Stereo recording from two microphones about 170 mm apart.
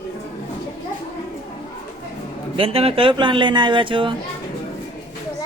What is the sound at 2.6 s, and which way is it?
Speech, 35° right (ahead or behind).